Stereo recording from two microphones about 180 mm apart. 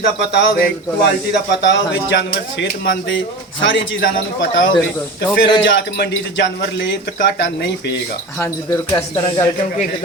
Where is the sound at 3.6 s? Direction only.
90° left; by 7.9 s 70° left (ahead or behind).